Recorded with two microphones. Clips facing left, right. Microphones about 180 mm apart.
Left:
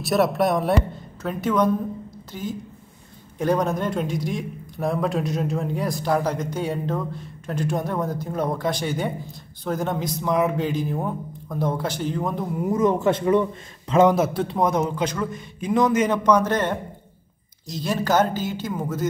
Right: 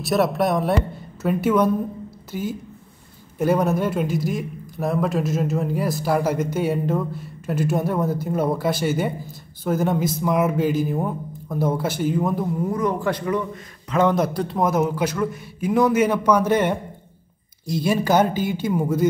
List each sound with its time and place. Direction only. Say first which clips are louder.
0.0 s a man's voice: even; centre (ahead or behind)
12.6 s a man's voice: left 5 dB; 20° left (ahead or behind)
14.1 s a man's voice: even; 5° left (ahead or behind); by 19.0 s 10° right (ahead or behind)